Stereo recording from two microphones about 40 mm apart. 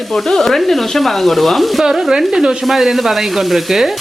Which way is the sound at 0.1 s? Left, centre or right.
Centre.